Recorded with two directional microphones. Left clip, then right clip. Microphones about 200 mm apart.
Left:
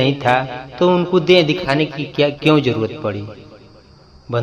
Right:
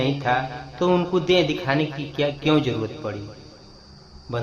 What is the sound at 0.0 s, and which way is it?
A man's voice, 30° left (ahead or behind).